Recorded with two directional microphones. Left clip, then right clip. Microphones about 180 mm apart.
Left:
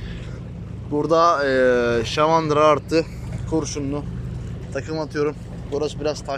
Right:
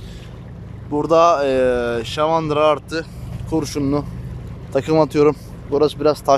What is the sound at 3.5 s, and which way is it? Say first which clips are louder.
Speech: right 4 dB; 20° right (ahead or behind).